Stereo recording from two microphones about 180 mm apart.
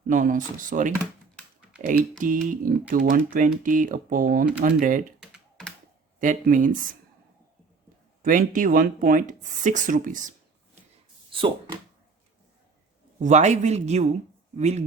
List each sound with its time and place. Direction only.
0.1 s speech: 45° right (ahead or behind)
5.2 s typing: centre (ahead or behind)
6.1 s speech: 45° right (ahead or behind)
8.2 s speech: 50° right (ahead or behind)
11.3 s a sound: 30° right (ahead or behind)
13.1 s speech: 40° right (ahead or behind)